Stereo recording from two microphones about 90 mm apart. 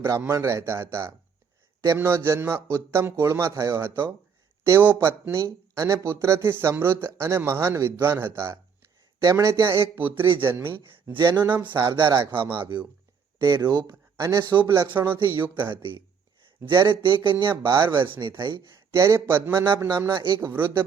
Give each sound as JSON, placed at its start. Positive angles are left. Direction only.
{"t": 0.3, "sound": "speech", "side_deg": -30}
{"t": 11.2, "sound": "speech", "side_deg": -60}
{"t": 11.4, "sound": "speech", "side_deg": -20}
{"t": 11.7, "sound": "speech", "side_deg": -60}
{"t": 13.4, "sound": "speech", "side_deg": -45}
{"t": 14.2, "sound": "speech", "side_deg": -40}
{"t": 16.6, "sound": "speech", "side_deg": -60}
{"t": 17.7, "sound": "speech", "side_deg": -25}
{"t": 18.0, "sound": "speech", "side_deg": -70}
{"t": 18.9, "sound": "speech", "side_deg": -30}
{"t": 20.1, "sound": "speech", "side_deg": -60}
{"t": 20.4, "sound": "speech", "side_deg": -25}